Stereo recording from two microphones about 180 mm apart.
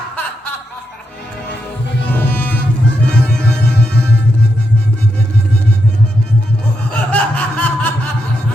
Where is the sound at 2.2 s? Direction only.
10° left (ahead or behind).